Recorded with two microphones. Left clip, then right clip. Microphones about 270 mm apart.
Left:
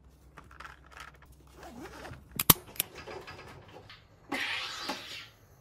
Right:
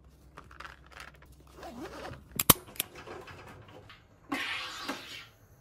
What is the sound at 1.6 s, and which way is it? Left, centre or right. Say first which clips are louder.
Scissors: right 3 dB; centre.